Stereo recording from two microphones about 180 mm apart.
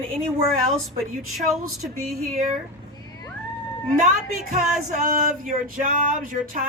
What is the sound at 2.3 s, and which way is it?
Speech, 50° right (ahead or behind).